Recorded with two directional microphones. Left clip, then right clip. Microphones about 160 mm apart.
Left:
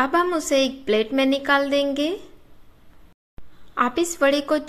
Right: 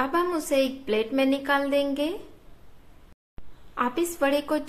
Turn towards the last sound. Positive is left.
turn(degrees=25)  # may be behind; listen again after turning